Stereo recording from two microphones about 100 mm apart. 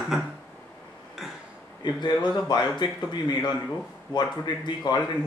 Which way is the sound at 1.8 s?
45° left (ahead or behind).